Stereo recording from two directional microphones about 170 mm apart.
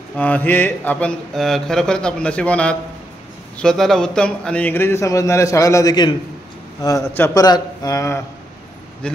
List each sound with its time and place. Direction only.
0.1 s a man's voice: 10° left (ahead or behind)
9.0 s speech: 5° left (ahead or behind)